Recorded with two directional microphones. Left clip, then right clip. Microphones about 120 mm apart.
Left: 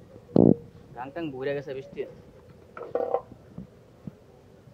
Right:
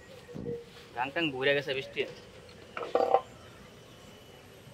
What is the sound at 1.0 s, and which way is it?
Speech, 10° left (ahead or behind).